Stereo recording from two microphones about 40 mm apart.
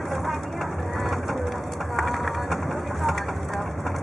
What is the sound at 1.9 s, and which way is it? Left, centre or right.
Vehicle, centre.